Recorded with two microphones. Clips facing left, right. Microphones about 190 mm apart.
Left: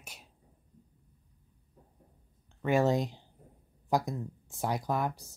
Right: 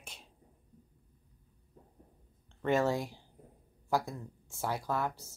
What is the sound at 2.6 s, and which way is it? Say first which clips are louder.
Speech: left 3 dB; 10° left (ahead or behind).